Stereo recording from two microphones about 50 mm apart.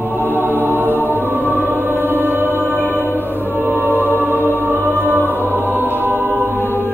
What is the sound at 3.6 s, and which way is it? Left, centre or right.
Music, right.